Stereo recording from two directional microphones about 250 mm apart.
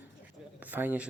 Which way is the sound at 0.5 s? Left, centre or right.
Centre.